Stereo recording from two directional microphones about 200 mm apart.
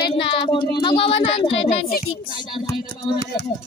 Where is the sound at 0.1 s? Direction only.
25° left (ahead or behind).